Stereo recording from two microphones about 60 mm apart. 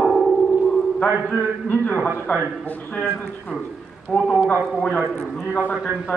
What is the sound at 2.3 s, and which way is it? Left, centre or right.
A man's voice, left.